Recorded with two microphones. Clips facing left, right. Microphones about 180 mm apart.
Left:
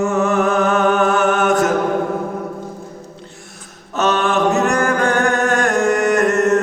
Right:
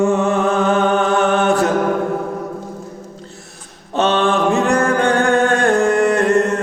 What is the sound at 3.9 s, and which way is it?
Chant, 30° right (ahead or behind).